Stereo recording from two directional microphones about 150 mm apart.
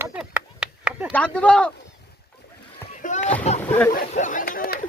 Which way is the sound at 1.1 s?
10° left (ahead or behind).